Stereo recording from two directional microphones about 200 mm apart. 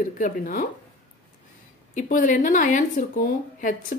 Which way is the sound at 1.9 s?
40° left (ahead or behind).